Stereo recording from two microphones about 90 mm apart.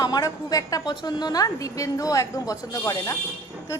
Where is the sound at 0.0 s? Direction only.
40° left (ahead or behind).